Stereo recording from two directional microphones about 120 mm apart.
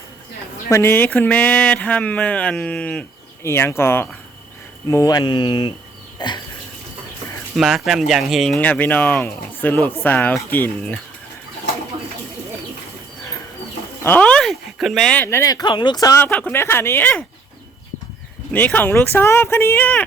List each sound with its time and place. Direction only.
0.7 s speech: 20° left (ahead or behind)
3.4 s speech: 20° left (ahead or behind)
4.9 s speech: 30° left (ahead or behind)
6.1 s a sound: 40° left (ahead or behind)
7.5 s speech: centre (ahead or behind)
8.5 s speech: 15° left (ahead or behind)
14.0 s speech: 15° left (ahead or behind)
15.2 s speech: 20° left (ahead or behind)
16.2 s speech: 15° left (ahead or behind)
18.5 s speech: 15° left (ahead or behind)